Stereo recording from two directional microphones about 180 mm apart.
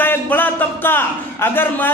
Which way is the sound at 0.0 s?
10° left (ahead or behind).